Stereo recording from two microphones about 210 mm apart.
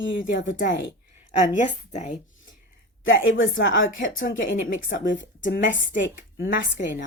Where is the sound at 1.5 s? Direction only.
35° left (ahead or behind).